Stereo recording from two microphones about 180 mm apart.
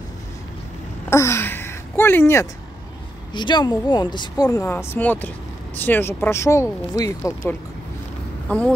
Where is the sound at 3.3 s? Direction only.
25° left (ahead or behind).